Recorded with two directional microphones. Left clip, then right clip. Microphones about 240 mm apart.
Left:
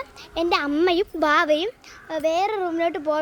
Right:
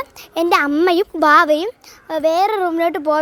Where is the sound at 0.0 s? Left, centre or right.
Right.